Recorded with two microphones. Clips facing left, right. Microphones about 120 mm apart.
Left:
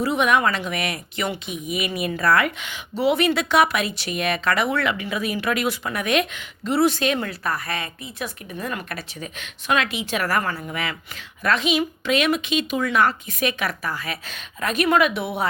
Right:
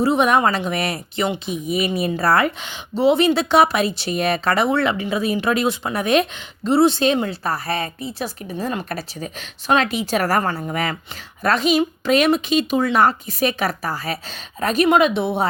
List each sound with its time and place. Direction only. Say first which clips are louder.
0.0 s a woman's voice: right 3 dB; 30° right (ahead or behind)